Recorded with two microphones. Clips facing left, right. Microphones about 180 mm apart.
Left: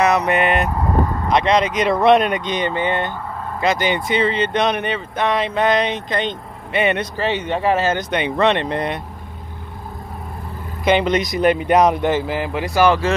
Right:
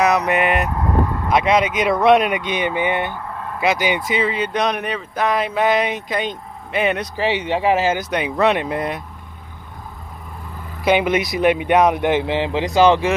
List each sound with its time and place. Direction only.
0.0 s speech: centre (ahead or behind)
7.2 s speech: 15° right (ahead or behind)
10.8 s speech: 5° right (ahead or behind)
12.3 s speech: 25° right (ahead or behind)